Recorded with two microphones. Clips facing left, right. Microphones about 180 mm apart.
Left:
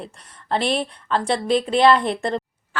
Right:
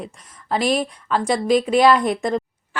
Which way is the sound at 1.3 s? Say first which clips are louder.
Right 3 dB; 30° left (ahead or behind).